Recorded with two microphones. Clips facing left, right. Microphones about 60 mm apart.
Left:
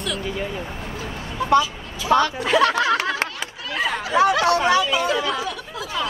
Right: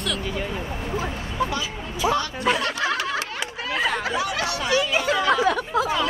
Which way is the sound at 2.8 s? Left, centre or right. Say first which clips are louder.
Left 4 dB; left.